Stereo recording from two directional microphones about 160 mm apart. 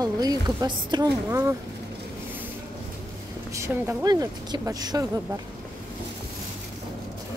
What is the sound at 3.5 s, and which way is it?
Speech, 20° right (ahead or behind).